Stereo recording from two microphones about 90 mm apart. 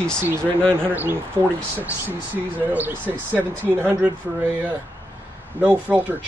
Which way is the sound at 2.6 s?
20° right (ahead or behind).